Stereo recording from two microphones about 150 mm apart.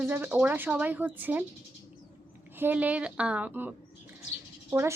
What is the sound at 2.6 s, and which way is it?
Speech, 10° right (ahead or behind).